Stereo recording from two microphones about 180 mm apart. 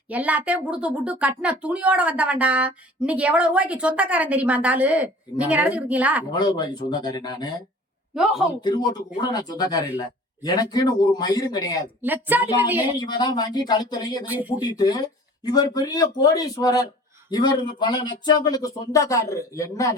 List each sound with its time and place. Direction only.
0.1 s speech: 10° right (ahead or behind)
6.3 s speech: 20° left (ahead or behind)
8.1 s a man's voice: centre (ahead or behind)
8.6 s speech: 25° left (ahead or behind)
12.0 s speech: 10° right (ahead or behind)
13.0 s speech: 25° left (ahead or behind)